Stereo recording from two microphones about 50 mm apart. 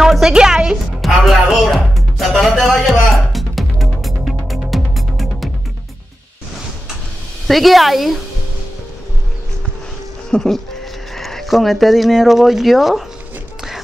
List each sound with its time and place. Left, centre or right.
0.3 s a woman's voice: centre
1.0 s music: centre
7.4 s speech: centre
10.3 s speech: left
11.1 s speech: centre